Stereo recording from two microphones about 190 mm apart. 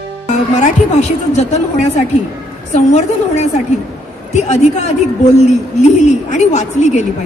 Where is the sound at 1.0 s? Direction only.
35° left (ahead or behind).